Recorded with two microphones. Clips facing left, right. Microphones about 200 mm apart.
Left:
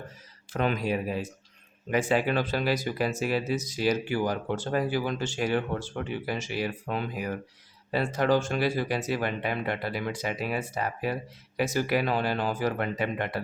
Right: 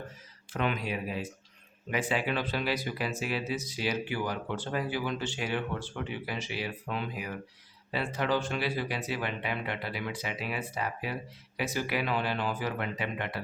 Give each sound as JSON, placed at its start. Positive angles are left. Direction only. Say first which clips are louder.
{"t": 0.5, "sound": "speech", "louder": "left 4 dB", "side_deg": 40}